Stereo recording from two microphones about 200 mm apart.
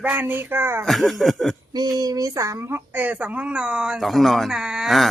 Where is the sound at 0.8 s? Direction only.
Centre (ahead or behind).